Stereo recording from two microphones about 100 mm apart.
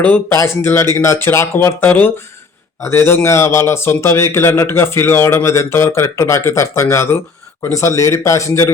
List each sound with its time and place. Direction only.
0.3 s a man's voice: 25° left (ahead or behind)